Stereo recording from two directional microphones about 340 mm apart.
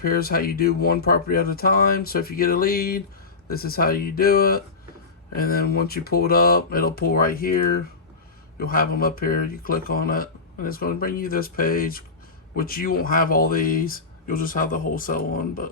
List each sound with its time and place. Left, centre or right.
0.0 s speech: left